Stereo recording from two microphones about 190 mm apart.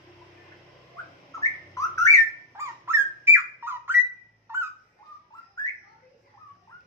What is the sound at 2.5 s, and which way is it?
Squawk, 15° right (ahead or behind).